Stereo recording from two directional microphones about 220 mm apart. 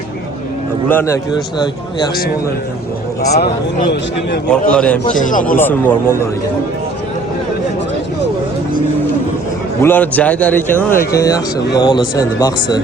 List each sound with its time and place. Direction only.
0.9 s a man's voice: 10° left (ahead or behind)
3.3 s speech: 45° left (ahead or behind)
4.4 s a man's voice: 5° left (ahead or behind)
5.0 s speech: 35° left (ahead or behind)
5.5 s a man's voice: 10° left (ahead or behind)
9.8 s a man's voice: 10° left (ahead or behind)